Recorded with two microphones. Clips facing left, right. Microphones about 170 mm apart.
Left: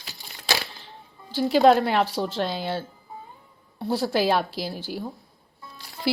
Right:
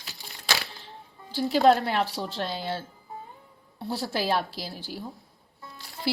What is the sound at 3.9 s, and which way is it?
A woman's voice, 90° left.